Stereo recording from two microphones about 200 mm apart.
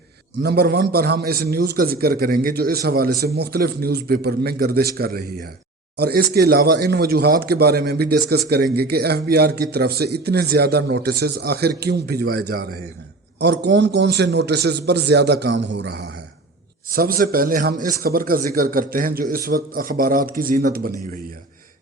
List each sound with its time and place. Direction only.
0.4 s a man's voice: 50° right (ahead or behind)